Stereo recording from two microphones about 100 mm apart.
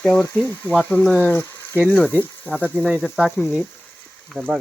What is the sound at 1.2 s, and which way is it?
Speech, 25° left (ahead or behind).